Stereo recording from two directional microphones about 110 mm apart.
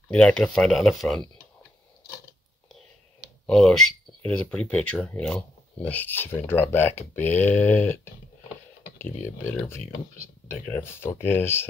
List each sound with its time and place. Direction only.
0.1 s speech: 5° left (ahead or behind)
3.4 s speech: 5° left (ahead or behind); by 11.6 s 20° left (ahead or behind)